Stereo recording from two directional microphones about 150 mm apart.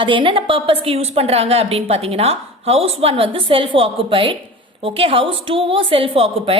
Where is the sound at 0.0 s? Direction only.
35° right (ahead or behind).